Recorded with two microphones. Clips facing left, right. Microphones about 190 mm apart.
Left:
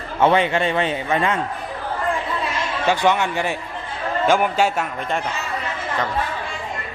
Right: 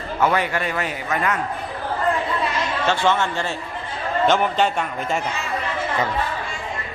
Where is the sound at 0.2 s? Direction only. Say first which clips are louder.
Left 4 dB; 25° left (ahead or behind).